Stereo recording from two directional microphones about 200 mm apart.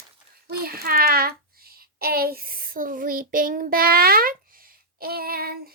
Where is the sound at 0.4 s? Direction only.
50° right (ahead or behind).